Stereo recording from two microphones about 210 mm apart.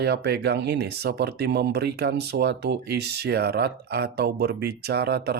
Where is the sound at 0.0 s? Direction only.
50° right (ahead or behind).